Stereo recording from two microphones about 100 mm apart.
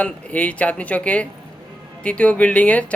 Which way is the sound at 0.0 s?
15° left (ahead or behind).